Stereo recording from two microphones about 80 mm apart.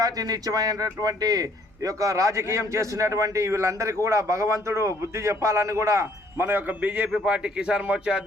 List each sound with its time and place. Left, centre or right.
0.0 s speech: right; by 8.2 s centre